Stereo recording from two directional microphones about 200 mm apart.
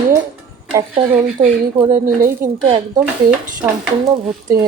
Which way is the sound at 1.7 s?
25° right (ahead or behind).